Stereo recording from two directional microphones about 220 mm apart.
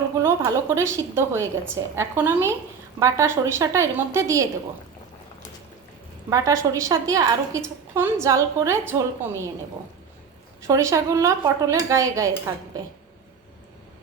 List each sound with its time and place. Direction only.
0.2 s a woman's voice: 10° right (ahead or behind)
6.3 s a woman's voice: 15° right (ahead or behind)
10.7 s a woman's voice: 15° right (ahead or behind)